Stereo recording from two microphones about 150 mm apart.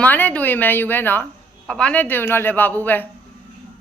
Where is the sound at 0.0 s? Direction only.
10° left (ahead or behind).